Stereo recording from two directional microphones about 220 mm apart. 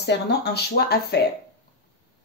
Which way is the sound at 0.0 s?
50° left (ahead or behind).